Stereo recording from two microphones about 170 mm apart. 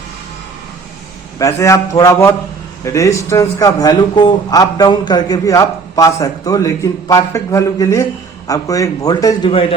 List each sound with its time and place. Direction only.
1.4 s a man's voice: 15° left (ahead or behind)
9.5 s a man's voice: 35° left (ahead or behind)